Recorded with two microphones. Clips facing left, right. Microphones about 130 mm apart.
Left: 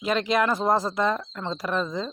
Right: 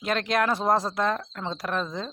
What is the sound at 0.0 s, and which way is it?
Speech, centre (ahead or behind).